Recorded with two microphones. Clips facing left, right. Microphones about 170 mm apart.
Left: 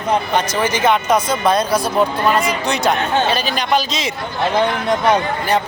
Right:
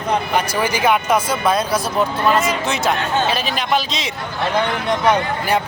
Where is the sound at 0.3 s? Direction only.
10° right (ahead or behind).